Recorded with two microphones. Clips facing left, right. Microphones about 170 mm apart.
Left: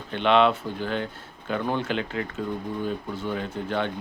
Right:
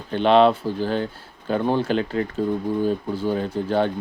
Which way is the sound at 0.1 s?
35° right (ahead or behind).